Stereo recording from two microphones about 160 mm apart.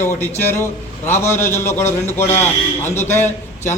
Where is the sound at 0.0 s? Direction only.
15° left (ahead or behind).